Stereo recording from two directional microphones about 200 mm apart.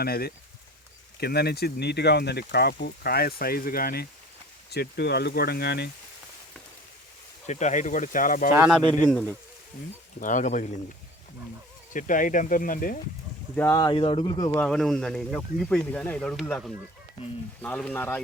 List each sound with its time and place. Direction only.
0.0 s speech: 50° left (ahead or behind)
7.4 s speech: 35° left (ahead or behind)
8.5 s speech: 5° right (ahead or behind)
9.0 s speech: 5° left (ahead or behind)
10.2 s speech: 40° left (ahead or behind)
11.9 s speech: 40° left (ahead or behind)
13.6 s speech: 15° left (ahead or behind)
14.6 s speech: centre (ahead or behind)